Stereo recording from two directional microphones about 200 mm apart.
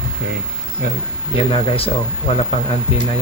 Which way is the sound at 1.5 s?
30° left (ahead or behind).